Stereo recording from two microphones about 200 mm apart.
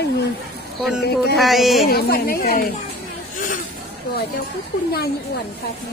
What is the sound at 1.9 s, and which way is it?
Speech, 50° left (ahead or behind).